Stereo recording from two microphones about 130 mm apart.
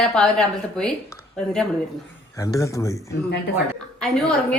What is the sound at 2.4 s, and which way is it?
Speech, 25° left (ahead or behind).